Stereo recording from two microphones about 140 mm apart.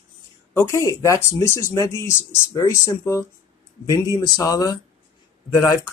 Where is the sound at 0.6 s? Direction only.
20° left (ahead or behind).